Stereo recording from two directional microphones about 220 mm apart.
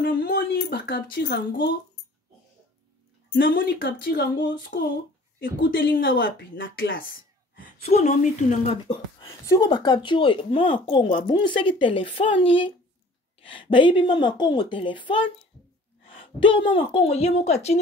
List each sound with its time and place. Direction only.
0.0 s speech: 45° left (ahead or behind)
3.3 s speech: 55° left (ahead or behind); by 4.9 s 40° left (ahead or behind)
5.7 s speech: 60° left (ahead or behind)
7.5 s speech: 30° left (ahead or behind)
9.2 s speech: 15° left (ahead or behind)